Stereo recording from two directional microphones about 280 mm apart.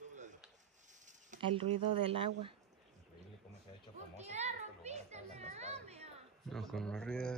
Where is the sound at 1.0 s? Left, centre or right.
Right.